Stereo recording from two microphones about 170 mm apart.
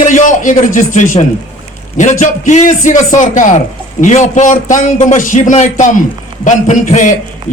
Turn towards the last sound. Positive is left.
turn(degrees=45)  # may be behind; listen again after turning